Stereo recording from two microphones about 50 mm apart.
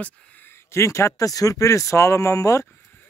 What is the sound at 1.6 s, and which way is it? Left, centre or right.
Speech, left.